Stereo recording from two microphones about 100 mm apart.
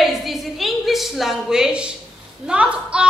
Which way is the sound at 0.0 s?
Centre (ahead or behind).